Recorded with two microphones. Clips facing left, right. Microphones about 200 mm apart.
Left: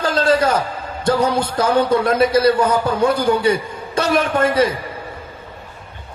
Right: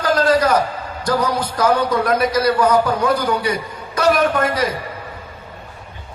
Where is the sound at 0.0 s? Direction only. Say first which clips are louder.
Even; 25° left (ahead or behind).